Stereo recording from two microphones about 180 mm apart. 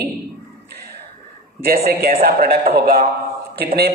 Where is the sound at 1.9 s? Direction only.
55° right (ahead or behind).